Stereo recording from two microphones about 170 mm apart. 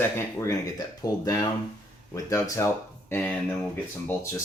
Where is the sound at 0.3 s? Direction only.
15° left (ahead or behind).